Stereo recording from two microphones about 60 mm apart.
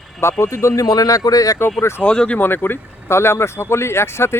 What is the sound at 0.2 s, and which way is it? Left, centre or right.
Speech, left.